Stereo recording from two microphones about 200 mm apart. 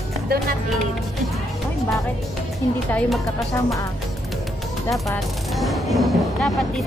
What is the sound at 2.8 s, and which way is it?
Speech, 5° left (ahead or behind).